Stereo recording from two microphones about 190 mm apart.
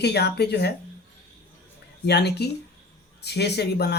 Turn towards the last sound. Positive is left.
turn(degrees=60)  # may be behind; listen again after turning